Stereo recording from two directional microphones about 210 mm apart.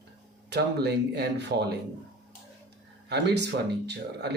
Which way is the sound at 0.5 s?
50° right (ahead or behind).